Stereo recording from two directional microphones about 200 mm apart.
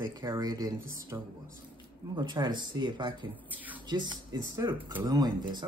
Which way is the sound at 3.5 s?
10° right (ahead or behind).